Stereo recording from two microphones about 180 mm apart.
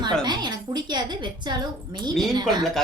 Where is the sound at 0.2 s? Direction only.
25° right (ahead or behind).